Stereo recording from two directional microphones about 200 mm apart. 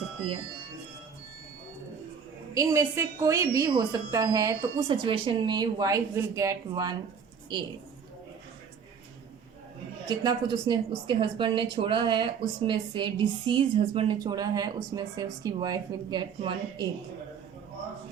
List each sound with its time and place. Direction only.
2.6 s a woman's voice: 15° right (ahead or behind)
10.1 s speech: 20° right (ahead or behind)